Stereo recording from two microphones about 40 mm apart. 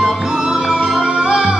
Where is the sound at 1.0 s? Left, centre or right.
Right.